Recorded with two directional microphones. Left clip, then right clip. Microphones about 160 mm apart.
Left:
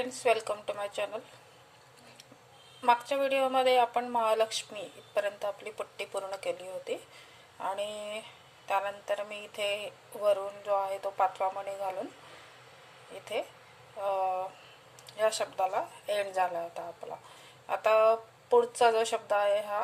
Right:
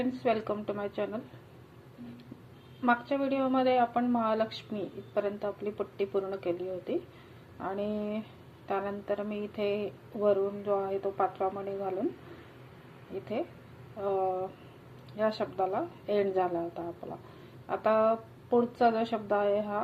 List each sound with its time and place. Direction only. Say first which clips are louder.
0.2 s speech: left 4 dB; 20° left (ahead or behind)
2.8 s speech: left 2 dB; 20° left (ahead or behind)
14.0 s speech: even; 15° left (ahead or behind)